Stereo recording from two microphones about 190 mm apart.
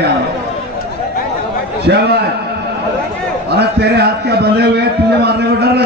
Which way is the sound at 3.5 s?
60° right (ahead or behind).